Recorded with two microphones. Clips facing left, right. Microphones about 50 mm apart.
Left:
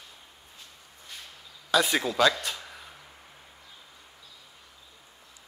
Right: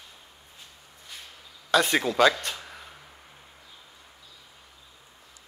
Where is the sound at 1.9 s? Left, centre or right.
Centre.